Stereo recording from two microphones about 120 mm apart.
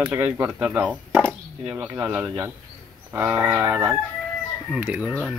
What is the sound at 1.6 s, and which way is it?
Speech, 15° right (ahead or behind).